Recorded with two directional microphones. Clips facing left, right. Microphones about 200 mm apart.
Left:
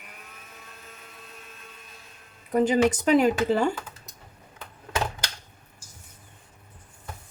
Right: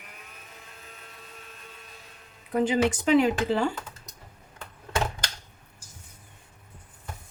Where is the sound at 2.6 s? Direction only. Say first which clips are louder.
Left 3 dB; 40° left (ahead or behind).